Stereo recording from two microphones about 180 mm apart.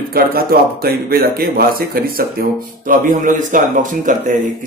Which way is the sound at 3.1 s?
45° right (ahead or behind).